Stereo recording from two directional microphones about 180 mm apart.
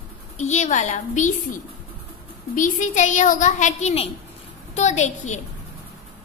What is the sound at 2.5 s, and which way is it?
A woman's voice, 45° left (ahead or behind).